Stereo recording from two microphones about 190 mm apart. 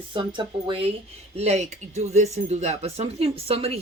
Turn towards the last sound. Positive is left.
turn(degrees=-30)  # may be behind; listen again after turning